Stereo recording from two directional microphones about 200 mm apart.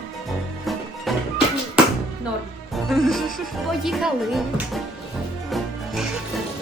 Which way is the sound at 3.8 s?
Centre (ahead or behind).